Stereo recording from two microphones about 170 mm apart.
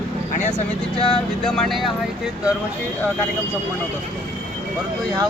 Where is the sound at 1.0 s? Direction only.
30° left (ahead or behind).